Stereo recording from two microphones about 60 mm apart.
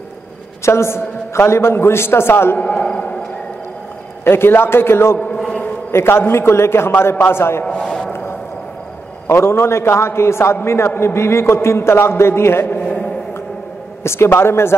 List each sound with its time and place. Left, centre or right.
0.7 s a man's voice: left
2.6 s a sound: centre
4.2 s a man's voice: left
7.6 s a sound: centre
9.3 s a man's voice: left
12.8 s mantra: centre
14.0 s a man's voice: left